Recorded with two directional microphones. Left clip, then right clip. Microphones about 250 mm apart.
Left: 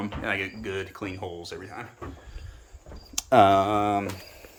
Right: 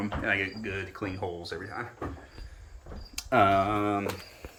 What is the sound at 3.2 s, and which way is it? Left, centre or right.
Speech, left.